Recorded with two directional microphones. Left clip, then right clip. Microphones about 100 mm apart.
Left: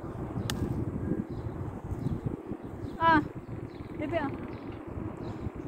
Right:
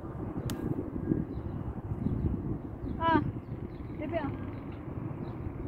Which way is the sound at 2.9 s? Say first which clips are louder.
Left 4 dB; 5° right (ahead or behind).